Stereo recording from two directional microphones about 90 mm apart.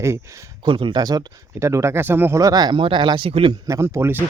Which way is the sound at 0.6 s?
65° right (ahead or behind).